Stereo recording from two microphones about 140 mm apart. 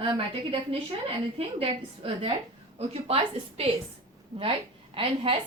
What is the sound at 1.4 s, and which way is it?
A woman's voice, 45° right (ahead or behind).